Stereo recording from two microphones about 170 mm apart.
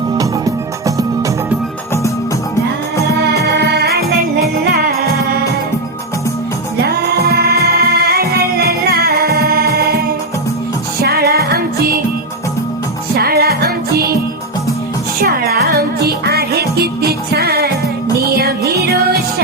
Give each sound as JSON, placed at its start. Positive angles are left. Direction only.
{"t": 0.2, "sound": "music", "side_deg": -20}
{"t": 3.6, "sound": "music", "side_deg": -70}
{"t": 6.8, "sound": "music", "side_deg": -70}
{"t": 11.0, "sound": "music", "side_deg": -65}
{"t": 13.1, "sound": "music", "side_deg": -65}
{"t": 15.2, "sound": "music", "side_deg": -65}